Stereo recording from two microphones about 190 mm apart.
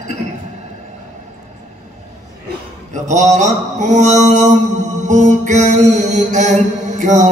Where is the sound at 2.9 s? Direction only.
40° right (ahead or behind).